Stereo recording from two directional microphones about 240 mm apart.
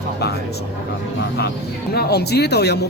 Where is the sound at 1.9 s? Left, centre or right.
Left.